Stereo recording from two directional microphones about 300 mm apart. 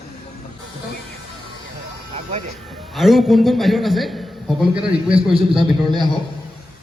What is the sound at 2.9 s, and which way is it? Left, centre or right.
A man's voice, centre.